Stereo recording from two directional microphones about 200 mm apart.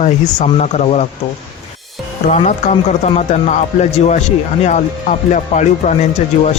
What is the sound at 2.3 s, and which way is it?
Speech, 35° left (ahead or behind).